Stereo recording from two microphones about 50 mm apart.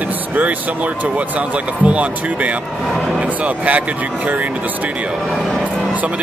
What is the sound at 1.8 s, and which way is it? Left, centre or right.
Speech, right.